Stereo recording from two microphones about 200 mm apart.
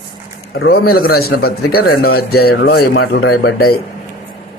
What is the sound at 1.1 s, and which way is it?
Speech, 50° left (ahead or behind).